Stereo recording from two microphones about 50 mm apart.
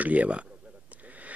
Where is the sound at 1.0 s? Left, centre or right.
Right.